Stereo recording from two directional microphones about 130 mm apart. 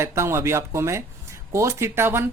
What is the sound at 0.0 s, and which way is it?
Speech, 20° right (ahead or behind).